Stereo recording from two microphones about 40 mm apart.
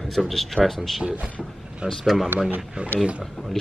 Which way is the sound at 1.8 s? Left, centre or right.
Right.